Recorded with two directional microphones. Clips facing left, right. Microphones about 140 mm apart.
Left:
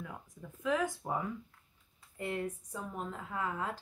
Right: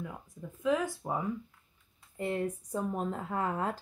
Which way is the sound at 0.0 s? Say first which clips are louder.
Right 4 dB; 10° right (ahead or behind).